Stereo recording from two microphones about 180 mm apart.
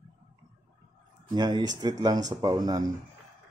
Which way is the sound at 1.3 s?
25° right (ahead or behind).